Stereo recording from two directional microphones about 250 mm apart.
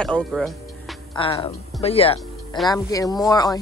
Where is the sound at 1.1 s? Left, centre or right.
Centre.